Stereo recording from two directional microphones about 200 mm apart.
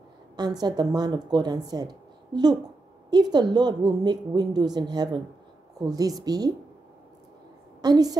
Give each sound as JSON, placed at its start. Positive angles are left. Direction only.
{"t": 0.4, "sound": "speech", "side_deg": -20}
{"t": 7.8, "sound": "speech", "side_deg": -20}